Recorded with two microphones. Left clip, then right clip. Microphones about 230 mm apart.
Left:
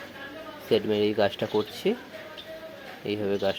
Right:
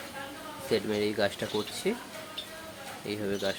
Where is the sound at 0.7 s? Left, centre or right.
Centre.